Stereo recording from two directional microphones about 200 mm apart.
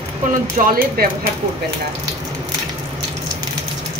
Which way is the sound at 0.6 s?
45° right (ahead or behind).